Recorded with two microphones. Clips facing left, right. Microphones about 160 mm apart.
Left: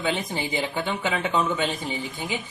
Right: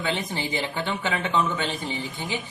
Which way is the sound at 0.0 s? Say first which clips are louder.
Left 1 dB; 15° left (ahead or behind).